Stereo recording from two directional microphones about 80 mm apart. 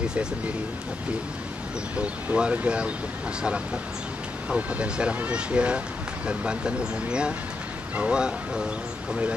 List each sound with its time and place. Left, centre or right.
2.0 s speech: centre
4.5 s speech: centre